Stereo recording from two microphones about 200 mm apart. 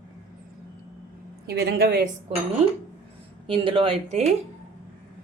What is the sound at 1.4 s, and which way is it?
Speech, 55° right (ahead or behind).